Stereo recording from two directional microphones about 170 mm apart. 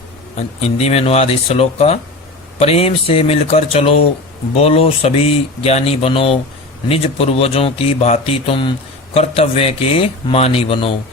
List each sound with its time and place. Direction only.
0.6 s speech: 40° left (ahead or behind)